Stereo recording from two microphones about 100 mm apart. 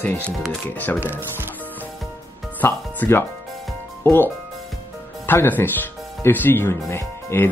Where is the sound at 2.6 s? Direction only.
20° left (ahead or behind).